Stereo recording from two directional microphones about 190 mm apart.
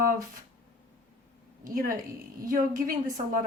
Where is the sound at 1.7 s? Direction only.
45° right (ahead or behind).